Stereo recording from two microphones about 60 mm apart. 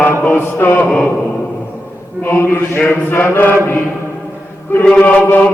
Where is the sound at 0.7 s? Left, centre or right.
Left.